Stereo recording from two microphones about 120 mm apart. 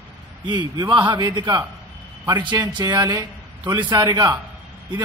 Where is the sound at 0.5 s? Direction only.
35° right (ahead or behind).